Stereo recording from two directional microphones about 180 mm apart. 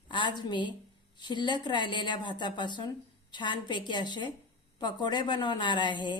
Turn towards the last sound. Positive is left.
turn(degrees=25)  # may be behind; listen again after turning